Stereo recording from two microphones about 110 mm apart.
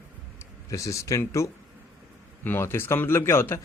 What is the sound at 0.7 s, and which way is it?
A man's voice, 30° left (ahead or behind).